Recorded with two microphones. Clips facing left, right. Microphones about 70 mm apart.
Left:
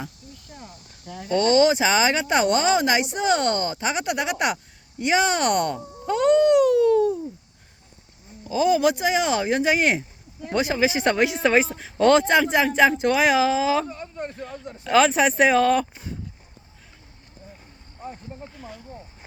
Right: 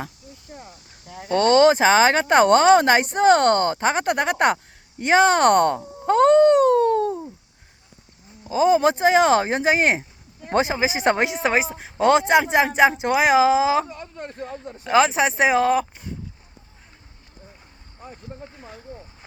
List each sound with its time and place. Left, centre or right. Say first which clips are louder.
0.4 s cricket: right 2 dB; centre
1.3 s speech: right 3 dB; right
8.4 s speech: right 2 dB; right
14.3 s a sound: right 2 dB; right
14.8 s speech: even; centre